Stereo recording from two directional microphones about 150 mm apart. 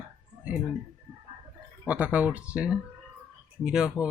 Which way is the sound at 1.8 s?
10° right (ahead or behind).